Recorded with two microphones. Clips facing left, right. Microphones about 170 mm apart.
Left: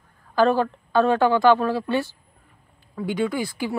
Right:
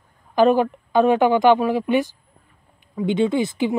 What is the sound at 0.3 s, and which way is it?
A woman's voice, 15° right (ahead or behind).